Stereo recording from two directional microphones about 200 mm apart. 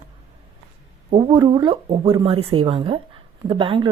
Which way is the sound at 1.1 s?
25° right (ahead or behind).